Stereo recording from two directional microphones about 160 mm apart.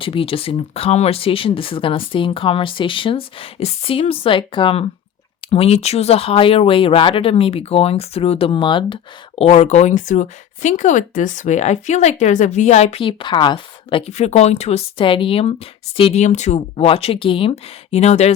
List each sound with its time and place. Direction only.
0.0 s speech: 35° left (ahead or behind)
9.4 s speech: 40° left (ahead or behind)